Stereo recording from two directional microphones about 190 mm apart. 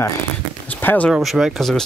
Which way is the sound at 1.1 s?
Centre (ahead or behind).